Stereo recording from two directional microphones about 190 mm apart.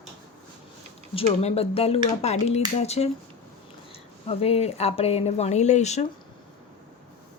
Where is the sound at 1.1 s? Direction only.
35° left (ahead or behind).